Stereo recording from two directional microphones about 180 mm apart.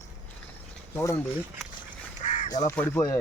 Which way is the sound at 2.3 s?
45° left (ahead or behind).